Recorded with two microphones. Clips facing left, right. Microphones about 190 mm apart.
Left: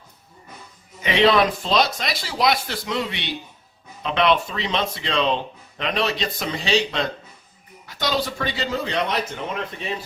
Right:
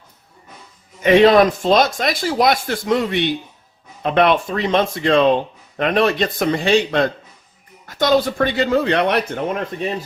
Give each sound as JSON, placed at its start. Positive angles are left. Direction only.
{"t": 1.0, "sound": "speech", "side_deg": -45}